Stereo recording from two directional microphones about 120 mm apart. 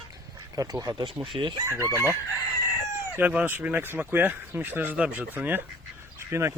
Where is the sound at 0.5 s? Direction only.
30° right (ahead or behind).